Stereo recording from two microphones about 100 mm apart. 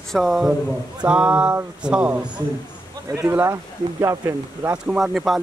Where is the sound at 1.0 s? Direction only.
10° right (ahead or behind).